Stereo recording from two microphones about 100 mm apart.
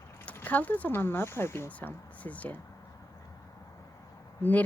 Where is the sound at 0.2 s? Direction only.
20° left (ahead or behind).